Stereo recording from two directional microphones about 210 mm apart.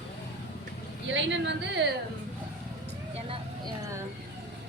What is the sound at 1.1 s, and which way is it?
Speech, 60° right (ahead or behind).